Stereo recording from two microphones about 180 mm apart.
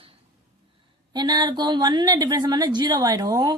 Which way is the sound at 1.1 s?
25° right (ahead or behind).